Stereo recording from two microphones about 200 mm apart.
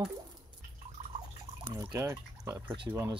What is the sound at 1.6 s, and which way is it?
Drip, 20° right (ahead or behind).